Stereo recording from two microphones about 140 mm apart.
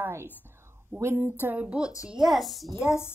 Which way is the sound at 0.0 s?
15° right (ahead or behind).